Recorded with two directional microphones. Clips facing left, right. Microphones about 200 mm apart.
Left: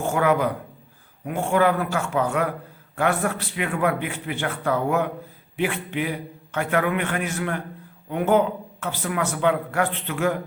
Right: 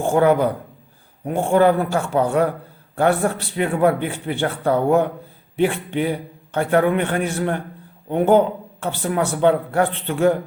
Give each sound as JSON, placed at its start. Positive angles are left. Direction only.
{"t": 0.0, "sound": "a man's voice", "side_deg": -30}